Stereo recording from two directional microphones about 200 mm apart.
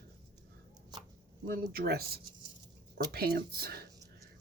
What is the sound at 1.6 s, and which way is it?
Speech, 50° right (ahead or behind).